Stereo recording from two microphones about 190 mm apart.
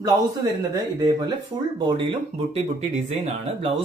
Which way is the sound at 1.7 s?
25° right (ahead or behind).